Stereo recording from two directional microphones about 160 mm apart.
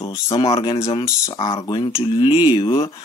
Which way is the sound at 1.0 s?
20° left (ahead or behind).